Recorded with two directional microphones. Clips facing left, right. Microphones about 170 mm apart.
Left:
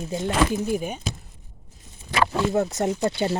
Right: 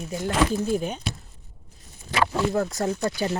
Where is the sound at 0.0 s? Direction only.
25° left (ahead or behind).